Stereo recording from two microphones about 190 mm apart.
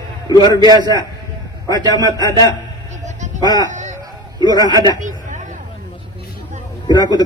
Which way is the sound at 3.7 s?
40° right (ahead or behind).